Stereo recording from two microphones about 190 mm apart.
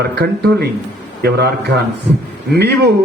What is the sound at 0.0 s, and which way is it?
A man's voice, 60° right (ahead or behind).